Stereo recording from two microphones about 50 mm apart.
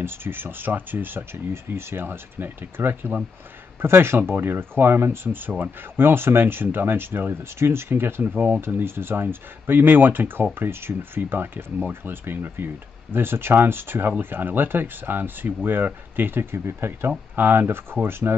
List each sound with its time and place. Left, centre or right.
0.0 s speech: right
1.5 s speech: right
16.5 s speech: right
17.4 s speech: right